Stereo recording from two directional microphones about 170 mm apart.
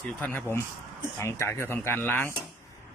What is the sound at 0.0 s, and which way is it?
Speech, 10° left (ahead or behind).